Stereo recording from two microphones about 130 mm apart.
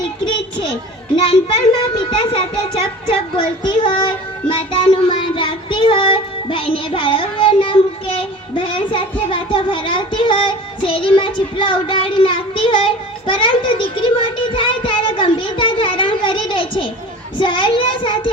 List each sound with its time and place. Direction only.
1.1 s a child's voice: 45° left (ahead or behind)